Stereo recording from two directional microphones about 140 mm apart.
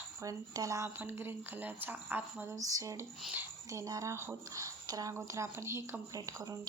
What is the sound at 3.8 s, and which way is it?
Speech, 25° right (ahead or behind).